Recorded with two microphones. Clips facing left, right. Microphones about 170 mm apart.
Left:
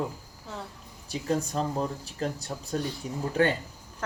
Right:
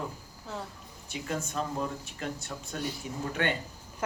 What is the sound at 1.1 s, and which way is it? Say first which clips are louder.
Speech: left 6 dB; 35° left (ahead or behind).